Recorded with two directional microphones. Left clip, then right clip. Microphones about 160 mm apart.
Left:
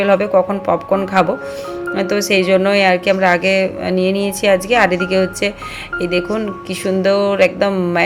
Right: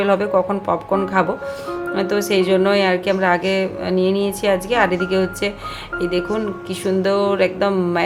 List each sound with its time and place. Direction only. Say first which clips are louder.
0.0 s speech: left 4 dB; 15° left (ahead or behind)